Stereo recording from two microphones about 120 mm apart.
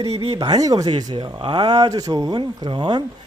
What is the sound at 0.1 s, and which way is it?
Speech, 50° right (ahead or behind).